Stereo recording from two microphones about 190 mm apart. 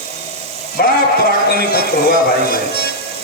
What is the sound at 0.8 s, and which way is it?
Speech, 55° left (ahead or behind).